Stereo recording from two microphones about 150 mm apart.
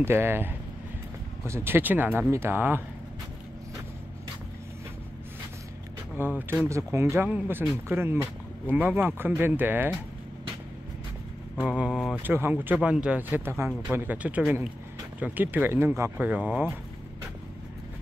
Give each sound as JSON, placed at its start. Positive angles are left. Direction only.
{"t": 0.0, "sound": "speech", "side_deg": -15}
{"t": 6.1, "sound": "speech", "side_deg": -15}
{"t": 11.6, "sound": "speech", "side_deg": -5}
{"t": 12.2, "sound": "speech", "side_deg": -15}